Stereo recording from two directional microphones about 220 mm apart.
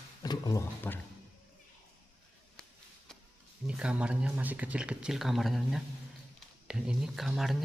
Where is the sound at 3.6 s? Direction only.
5° right (ahead or behind).